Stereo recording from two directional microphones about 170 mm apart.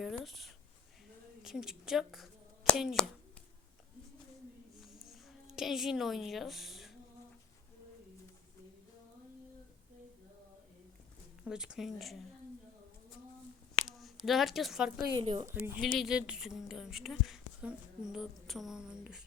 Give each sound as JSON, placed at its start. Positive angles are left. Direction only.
{"t": 0.0, "sound": "a sound", "side_deg": 0}
{"t": 1.4, "sound": "speech", "side_deg": -5}
{"t": 4.8, "sound": "a sound", "side_deg": 0}
{"t": 11.4, "sound": "a woman's voice", "side_deg": -5}
{"t": 13.8, "sound": "speech", "side_deg": 0}
{"t": 15.1, "sound": "speech", "side_deg": -30}
{"t": 15.8, "sound": "a woman's voice", "side_deg": 0}